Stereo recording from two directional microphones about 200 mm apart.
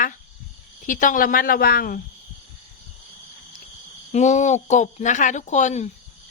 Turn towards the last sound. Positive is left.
turn(degrees=35)  # may be behind; listen again after turning